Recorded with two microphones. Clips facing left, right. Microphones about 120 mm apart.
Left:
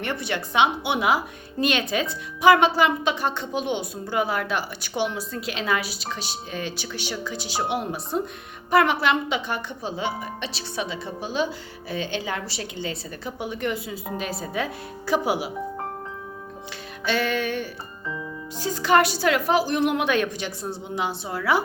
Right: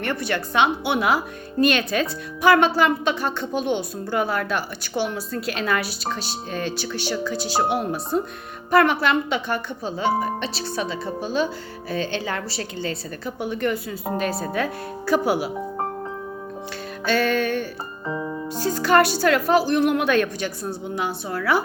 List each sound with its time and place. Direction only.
0.0 s a woman's voice: 20° left (ahead or behind)
14.3 s speech: 65° right (ahead or behind)
14.5 s speech: 15° left (ahead or behind)
17.1 s speech: 15° left (ahead or behind)
18.0 s music: 45° right (ahead or behind)
18.7 s a woman's voice: 15° left (ahead or behind)